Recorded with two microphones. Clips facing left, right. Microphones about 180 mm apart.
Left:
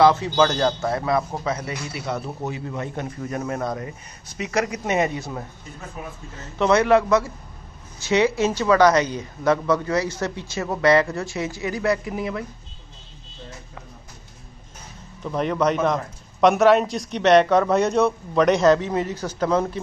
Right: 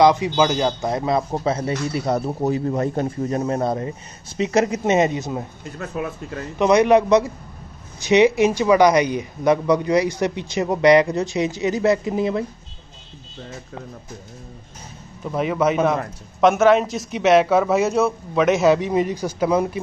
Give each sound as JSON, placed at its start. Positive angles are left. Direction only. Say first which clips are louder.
{"t": 0.0, "sound": "a man's voice", "louder": "right 1 dB", "side_deg": -15}
{"t": 5.8, "sound": "speech", "louder": "right 9 dB", "side_deg": -75}
{"t": 6.6, "sound": "speech", "louder": "right 3 dB", "side_deg": -15}
{"t": 15.2, "sound": "a man's voice", "louder": "right 1 dB", "side_deg": -5}